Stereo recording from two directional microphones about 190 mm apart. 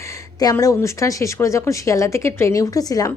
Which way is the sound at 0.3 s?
20° left (ahead or behind).